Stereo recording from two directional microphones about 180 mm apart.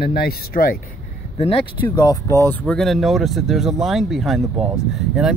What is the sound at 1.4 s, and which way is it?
Speech, 35° left (ahead or behind).